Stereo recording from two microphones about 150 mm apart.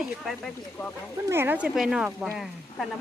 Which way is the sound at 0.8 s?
20° left (ahead or behind).